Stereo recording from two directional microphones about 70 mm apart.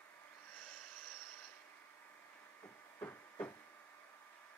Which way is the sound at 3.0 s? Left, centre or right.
Left.